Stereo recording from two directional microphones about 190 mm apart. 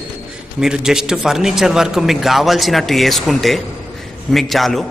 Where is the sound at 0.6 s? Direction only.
5° right (ahead or behind).